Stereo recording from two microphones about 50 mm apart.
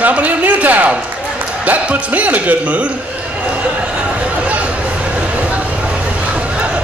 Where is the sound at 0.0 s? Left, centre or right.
Right.